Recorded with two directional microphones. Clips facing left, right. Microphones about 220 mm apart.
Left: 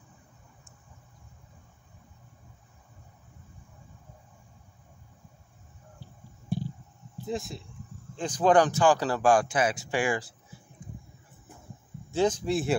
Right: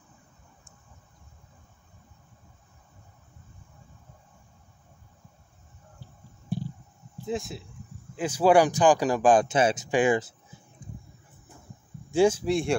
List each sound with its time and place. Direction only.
7.2 s speech: centre (ahead or behind); by 10.3 s 20° right (ahead or behind)
12.1 s speech: 10° right (ahead or behind)